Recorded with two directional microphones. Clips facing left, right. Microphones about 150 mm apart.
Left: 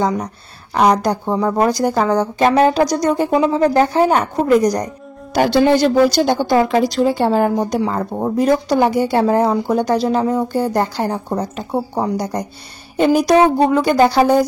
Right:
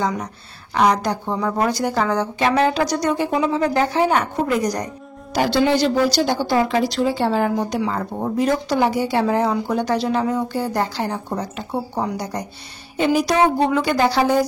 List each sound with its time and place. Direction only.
0.7 s a woman's voice: 40° left (ahead or behind)
10.6 s a woman's voice: 50° left (ahead or behind)